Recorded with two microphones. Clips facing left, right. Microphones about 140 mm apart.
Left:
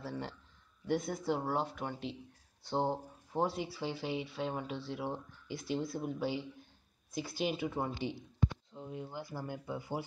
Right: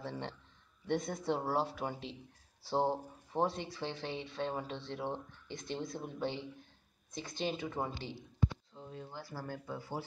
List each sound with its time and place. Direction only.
0.8 s speech: centre (ahead or behind)